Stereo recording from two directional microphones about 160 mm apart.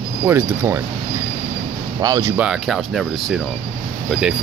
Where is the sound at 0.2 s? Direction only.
10° right (ahead or behind).